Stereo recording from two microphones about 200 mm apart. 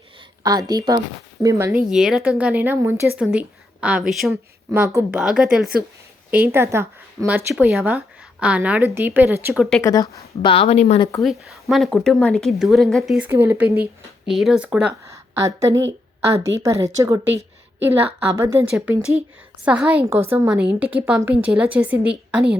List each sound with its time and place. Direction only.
0.4 s a woman's voice: 20° right (ahead or behind); by 4.4 s centre (ahead or behind)
4.7 s a woman's voice: 10° right (ahead or behind)
9.8 s a woman's voice: 20° left (ahead or behind)
11.2 s a woman's voice: centre (ahead or behind)